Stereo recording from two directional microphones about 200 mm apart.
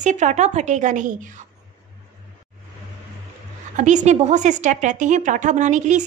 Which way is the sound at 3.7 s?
35° right (ahead or behind).